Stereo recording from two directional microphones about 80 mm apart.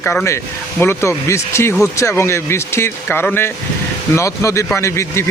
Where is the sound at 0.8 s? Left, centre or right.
Left.